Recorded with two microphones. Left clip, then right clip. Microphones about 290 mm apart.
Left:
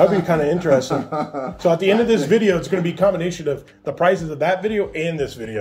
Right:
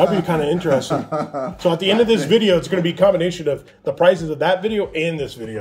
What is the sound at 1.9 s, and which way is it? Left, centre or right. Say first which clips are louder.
A man's voice: right 3 dB; right.